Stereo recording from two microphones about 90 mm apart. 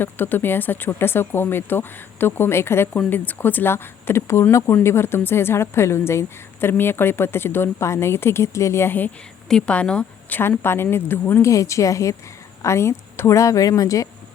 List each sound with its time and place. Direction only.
0.0 s a woman's voice: 20° left (ahead or behind)
9.5 s a woman's voice: 10° left (ahead or behind)
11.5 s a woman's voice: 35° left (ahead or behind)